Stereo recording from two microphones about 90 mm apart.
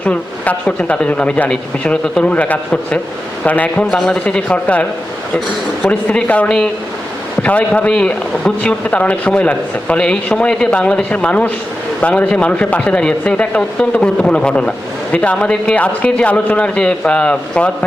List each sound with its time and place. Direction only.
0.0 s speech: 15° left (ahead or behind)
5.9 s speech: 15° left (ahead or behind)